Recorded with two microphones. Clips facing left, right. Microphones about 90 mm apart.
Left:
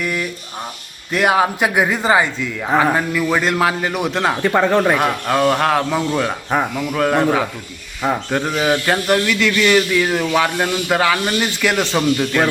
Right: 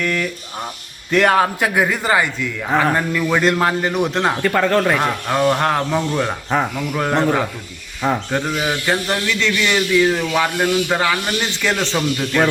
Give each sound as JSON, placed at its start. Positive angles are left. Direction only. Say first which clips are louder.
{"t": 0.0, "sound": "speech", "louder": "right 1 dB", "side_deg": 10}
{"t": 4.4, "sound": "speech", "louder": "left 2 dB", "side_deg": 15}
{"t": 6.9, "sound": "speech", "louder": "left 4 dB", "side_deg": -5}
{"t": 7.2, "sound": "speech", "louder": "left 1 dB", "side_deg": 5}
{"t": 9.4, "sound": "speech", "louder": "left 4 dB", "side_deg": 0}